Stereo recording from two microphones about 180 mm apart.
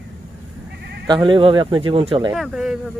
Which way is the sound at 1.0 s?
25° right (ahead or behind).